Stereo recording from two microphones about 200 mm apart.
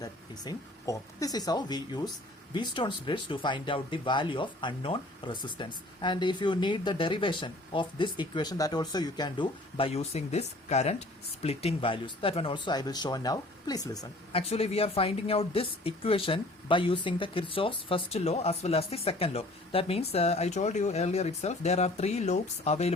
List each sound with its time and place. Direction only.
0.0 s speech: 20° left (ahead or behind)
14.5 s speech: 30° left (ahead or behind)